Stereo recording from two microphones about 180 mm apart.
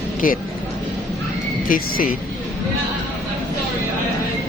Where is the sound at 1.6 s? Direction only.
50° left (ahead or behind).